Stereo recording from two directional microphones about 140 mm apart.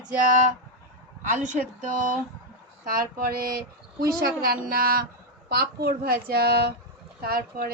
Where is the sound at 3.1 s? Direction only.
90° right.